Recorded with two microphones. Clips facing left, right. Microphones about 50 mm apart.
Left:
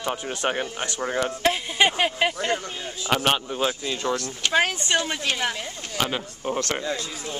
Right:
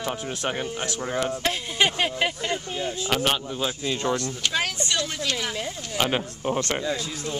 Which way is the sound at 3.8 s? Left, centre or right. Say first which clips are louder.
Right 1 dB; centre.